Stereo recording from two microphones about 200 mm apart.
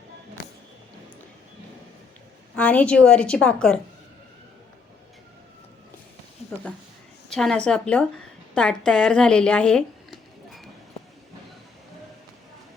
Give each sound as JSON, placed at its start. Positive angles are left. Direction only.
{"t": 2.6, "sound": "a woman's voice", "side_deg": 5}
{"t": 7.3, "sound": "a woman's voice", "side_deg": 0}